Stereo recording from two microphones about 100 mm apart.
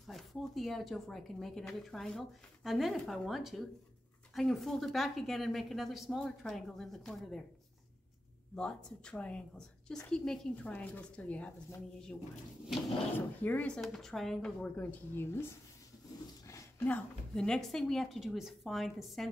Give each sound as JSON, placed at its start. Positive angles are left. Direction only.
{"t": 0.0, "sound": "speech", "side_deg": 0}
{"t": 8.5, "sound": "a woman's voice", "side_deg": 5}
{"t": 13.4, "sound": "a woman's voice", "side_deg": 15}
{"t": 13.7, "sound": "speech", "side_deg": 0}
{"t": 14.8, "sound": "speech", "side_deg": 20}
{"t": 16.8, "sound": "speech", "side_deg": 10}